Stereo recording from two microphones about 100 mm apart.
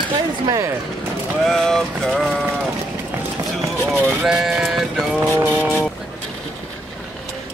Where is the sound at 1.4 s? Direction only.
5° left (ahead or behind).